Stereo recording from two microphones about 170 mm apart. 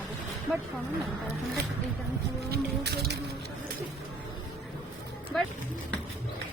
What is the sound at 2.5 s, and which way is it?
Music, 80° right.